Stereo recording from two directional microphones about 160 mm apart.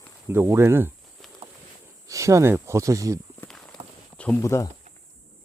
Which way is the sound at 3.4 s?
5° left (ahead or behind).